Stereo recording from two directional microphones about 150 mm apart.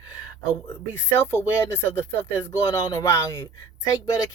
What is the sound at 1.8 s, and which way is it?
Speech, 15° left (ahead or behind).